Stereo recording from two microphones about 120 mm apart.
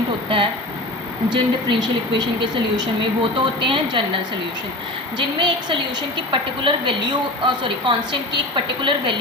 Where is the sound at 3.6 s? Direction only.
40° right (ahead or behind).